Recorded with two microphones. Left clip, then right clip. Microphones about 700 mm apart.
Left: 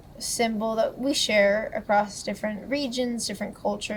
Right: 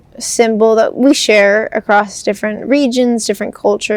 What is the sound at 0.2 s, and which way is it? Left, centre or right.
Speech, right.